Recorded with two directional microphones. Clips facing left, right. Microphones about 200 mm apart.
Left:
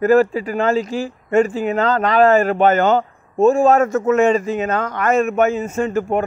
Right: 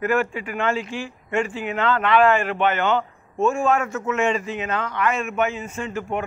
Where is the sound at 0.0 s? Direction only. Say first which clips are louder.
Left 9 dB; 35° left (ahead or behind).